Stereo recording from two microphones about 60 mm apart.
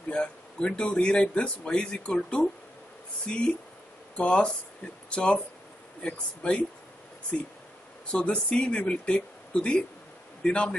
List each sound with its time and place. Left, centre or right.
0.1 s speech: centre
8.1 s speech: centre